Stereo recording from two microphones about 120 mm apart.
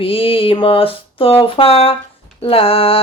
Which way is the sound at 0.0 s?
50° left (ahead or behind).